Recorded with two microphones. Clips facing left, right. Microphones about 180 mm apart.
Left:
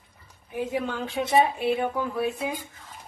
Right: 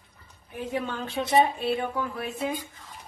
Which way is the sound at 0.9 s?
5° left (ahead or behind).